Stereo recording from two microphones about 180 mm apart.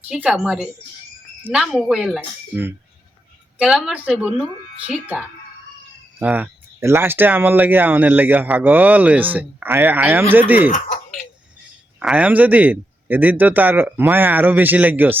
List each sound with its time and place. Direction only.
0.1 s speech: 5° right (ahead or behind)
3.6 s speech: centre (ahead or behind)
10.7 s speech: 40° left (ahead or behind)
11.9 s speech: 5° right (ahead or behind)